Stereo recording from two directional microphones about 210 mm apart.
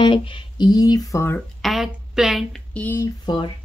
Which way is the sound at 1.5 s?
Centre (ahead or behind).